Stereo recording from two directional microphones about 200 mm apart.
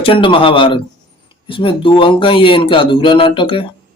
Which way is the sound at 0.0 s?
25° left (ahead or behind).